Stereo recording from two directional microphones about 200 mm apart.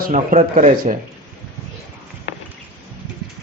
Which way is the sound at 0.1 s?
40° right (ahead or behind).